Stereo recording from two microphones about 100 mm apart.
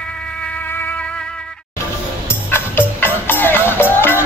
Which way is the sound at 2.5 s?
20° left (ahead or behind).